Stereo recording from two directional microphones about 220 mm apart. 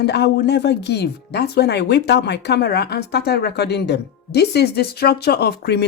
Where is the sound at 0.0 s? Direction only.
50° left (ahead or behind).